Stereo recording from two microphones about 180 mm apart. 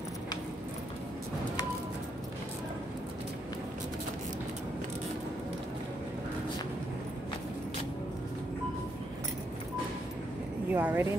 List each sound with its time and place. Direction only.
10.7 s a woman's voice: 10° right (ahead or behind)